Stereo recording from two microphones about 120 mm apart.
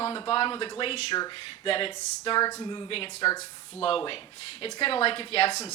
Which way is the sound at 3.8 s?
50° left (ahead or behind).